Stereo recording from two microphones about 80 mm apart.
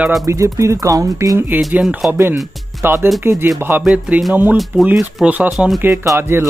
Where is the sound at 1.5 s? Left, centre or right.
Right.